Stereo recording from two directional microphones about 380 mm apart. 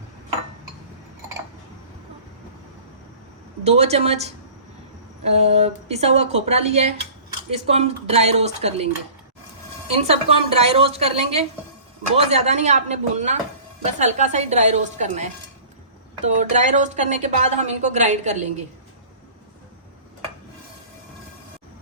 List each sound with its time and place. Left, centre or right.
3.6 s a woman's voice: centre
9.9 s a woman's voice: centre
16.2 s a woman's voice: centre